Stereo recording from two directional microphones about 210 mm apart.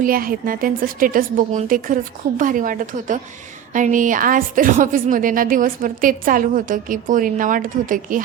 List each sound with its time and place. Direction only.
0.0 s a woman's voice: 40° right (ahead or behind)